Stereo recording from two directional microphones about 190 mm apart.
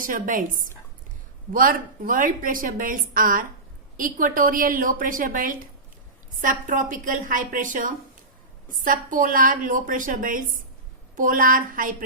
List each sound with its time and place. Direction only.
0.0 s a woman's voice: 45° right (ahead or behind)
1.5 s a woman's voice: 45° right (ahead or behind)